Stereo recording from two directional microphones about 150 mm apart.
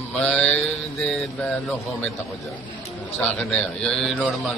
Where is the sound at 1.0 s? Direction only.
5° left (ahead or behind).